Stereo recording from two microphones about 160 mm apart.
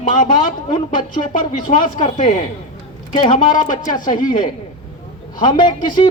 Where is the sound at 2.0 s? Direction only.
35° left (ahead or behind).